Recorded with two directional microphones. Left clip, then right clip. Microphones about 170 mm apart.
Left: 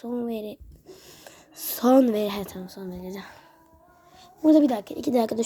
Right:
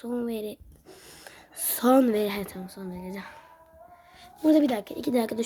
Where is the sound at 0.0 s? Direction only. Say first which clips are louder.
Left 1 dB; centre (ahead or behind); by 3.5 s 15° left (ahead or behind).